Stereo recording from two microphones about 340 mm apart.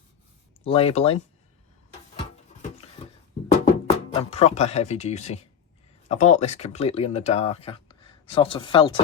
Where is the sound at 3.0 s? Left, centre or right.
Centre.